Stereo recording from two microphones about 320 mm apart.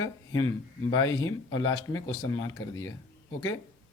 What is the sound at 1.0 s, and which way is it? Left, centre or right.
Speech, left.